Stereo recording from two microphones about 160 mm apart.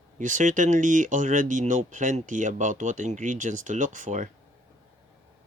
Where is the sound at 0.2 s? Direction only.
50° right (ahead or behind).